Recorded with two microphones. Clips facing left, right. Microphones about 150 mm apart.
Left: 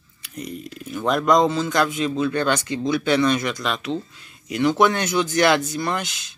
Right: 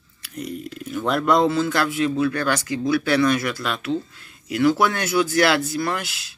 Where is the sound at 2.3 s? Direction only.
25° left (ahead or behind).